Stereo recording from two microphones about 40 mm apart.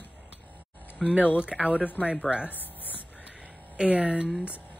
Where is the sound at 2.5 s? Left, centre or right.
Left.